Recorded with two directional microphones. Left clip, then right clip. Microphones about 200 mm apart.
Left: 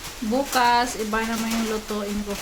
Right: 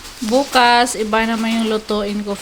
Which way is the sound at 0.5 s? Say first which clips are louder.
Right 6 dB; 40° right (ahead or behind).